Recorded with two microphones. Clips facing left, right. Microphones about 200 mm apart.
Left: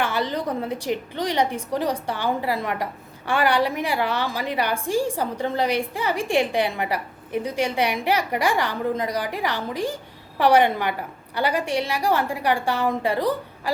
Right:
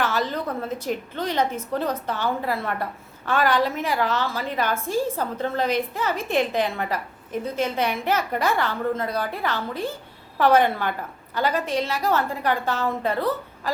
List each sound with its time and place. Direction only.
0.0 s a woman's voice: 10° left (ahead or behind)